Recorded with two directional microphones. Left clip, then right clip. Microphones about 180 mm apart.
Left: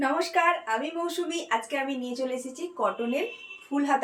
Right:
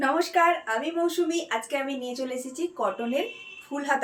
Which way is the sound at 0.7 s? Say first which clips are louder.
Right 2 dB; 20° right (ahead or behind).